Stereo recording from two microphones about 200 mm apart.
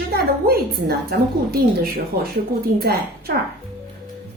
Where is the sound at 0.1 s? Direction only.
50° right (ahead or behind).